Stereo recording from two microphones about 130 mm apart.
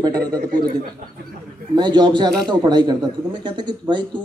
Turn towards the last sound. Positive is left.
turn(degrees=-35)  # may be behind; listen again after turning